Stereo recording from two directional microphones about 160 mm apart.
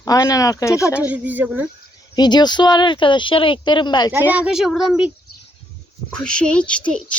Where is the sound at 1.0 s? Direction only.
10° right (ahead or behind).